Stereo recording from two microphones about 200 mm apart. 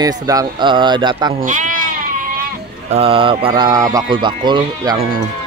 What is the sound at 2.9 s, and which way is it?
Speech, 30° right (ahead or behind).